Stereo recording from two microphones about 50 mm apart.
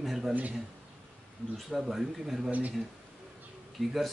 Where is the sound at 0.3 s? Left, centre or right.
Right.